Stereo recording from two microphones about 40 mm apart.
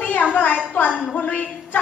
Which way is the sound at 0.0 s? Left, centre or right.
Left.